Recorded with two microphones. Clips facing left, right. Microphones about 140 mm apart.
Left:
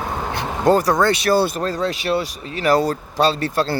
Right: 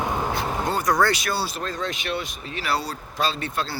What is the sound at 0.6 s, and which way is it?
Speech, 40° left (ahead or behind).